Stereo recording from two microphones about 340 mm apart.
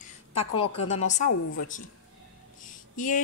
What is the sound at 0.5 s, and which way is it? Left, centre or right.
Speech, left.